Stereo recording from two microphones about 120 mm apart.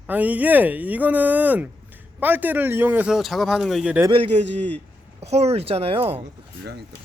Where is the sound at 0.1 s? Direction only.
15° right (ahead or behind).